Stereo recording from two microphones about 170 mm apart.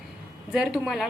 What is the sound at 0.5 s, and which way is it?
Speech, 5° right (ahead or behind).